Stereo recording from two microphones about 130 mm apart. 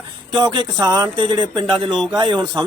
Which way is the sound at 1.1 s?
40° right (ahead or behind).